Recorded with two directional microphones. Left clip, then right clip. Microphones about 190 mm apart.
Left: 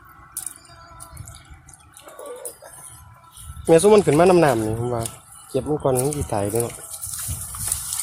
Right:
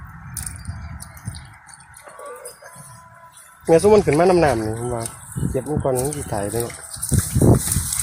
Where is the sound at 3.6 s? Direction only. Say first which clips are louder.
Even; 5° left (ahead or behind).